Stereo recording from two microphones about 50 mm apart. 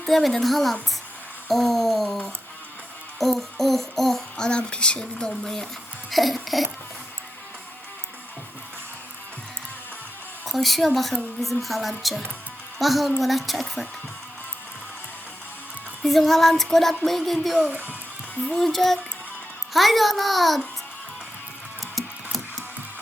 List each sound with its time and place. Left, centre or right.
0.0 s a woman's voice: centre
3.2 s music: centre
4.4 s speech: centre
6.1 s a sound: centre
10.4 s a woman's voice: centre
16.0 s a woman's voice: centre
17.7 s a child's voice: right
18.4 s a woman's voice: centre
21.9 s patter: centre